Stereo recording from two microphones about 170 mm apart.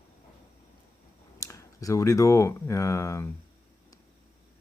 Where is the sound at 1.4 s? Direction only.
20° left (ahead or behind).